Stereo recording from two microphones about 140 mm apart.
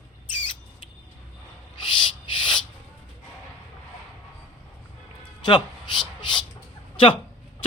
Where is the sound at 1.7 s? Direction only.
35° left (ahead or behind).